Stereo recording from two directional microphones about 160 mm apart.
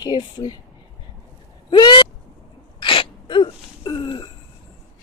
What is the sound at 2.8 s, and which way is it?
Sneeze, 30° left (ahead or behind).